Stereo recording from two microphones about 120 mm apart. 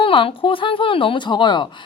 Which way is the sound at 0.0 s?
45° left (ahead or behind).